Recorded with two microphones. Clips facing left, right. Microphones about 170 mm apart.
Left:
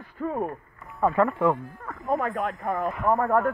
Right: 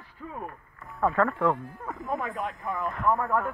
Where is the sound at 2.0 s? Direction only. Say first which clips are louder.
Left 6 dB; 45° left (ahead or behind).